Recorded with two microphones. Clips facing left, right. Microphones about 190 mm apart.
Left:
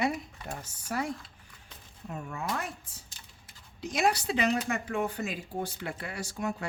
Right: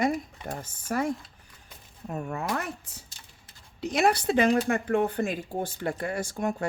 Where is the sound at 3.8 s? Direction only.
60° right (ahead or behind).